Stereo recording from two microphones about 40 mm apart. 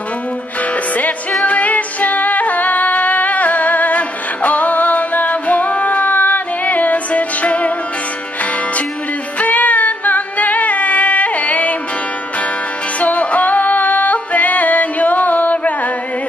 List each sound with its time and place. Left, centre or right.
1.4 s music: left
9.4 s music: left
13.0 s music: left